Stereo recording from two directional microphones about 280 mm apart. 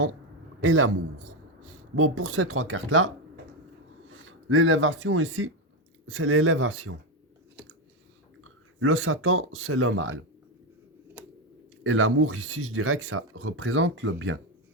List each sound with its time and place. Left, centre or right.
0.6 s a man's voice: right
2.0 s speech: right
4.1 s speech: right
7.6 s chewing: centre
8.4 s speech: right
11.2 s a sound: centre
11.8 s speech: right